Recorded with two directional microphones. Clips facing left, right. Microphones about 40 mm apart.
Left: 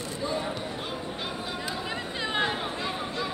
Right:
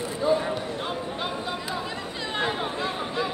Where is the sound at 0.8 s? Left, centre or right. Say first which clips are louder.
Right 4 dB; centre.